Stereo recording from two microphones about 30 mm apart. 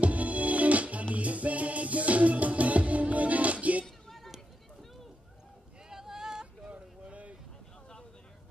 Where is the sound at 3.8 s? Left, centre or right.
Centre.